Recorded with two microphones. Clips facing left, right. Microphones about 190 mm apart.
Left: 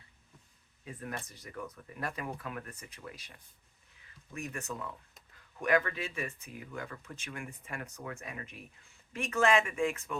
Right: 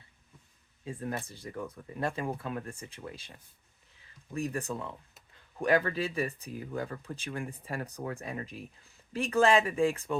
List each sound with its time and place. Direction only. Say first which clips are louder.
0.9 s speech: right 5 dB; 30° right (ahead or behind)
4.4 s speech: right 6 dB; 35° right (ahead or behind)